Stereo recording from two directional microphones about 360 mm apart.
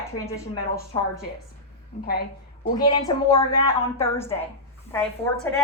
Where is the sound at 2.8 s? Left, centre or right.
Centre.